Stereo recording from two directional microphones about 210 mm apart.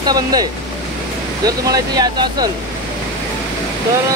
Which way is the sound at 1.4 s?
20° right (ahead or behind).